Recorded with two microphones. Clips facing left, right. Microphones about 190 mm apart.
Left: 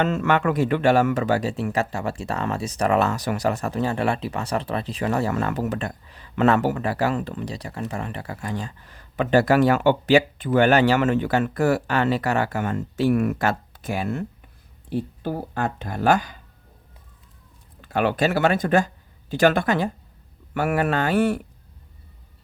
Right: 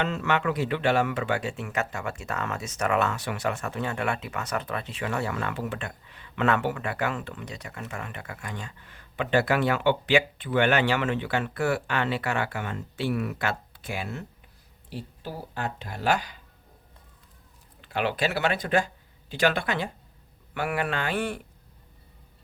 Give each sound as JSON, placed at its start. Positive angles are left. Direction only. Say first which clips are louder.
{"t": 0.0, "sound": "speech", "louder": "left 5 dB", "side_deg": 50}
{"t": 17.7, "sound": "speech", "louder": "left 6 dB", "side_deg": 45}